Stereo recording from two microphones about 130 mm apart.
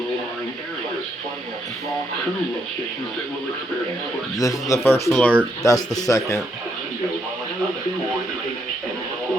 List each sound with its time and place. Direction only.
4.4 s a man's voice: 25° left (ahead or behind)
5.0 s speech: 5° left (ahead or behind)
5.6 s a man's voice: 25° left (ahead or behind)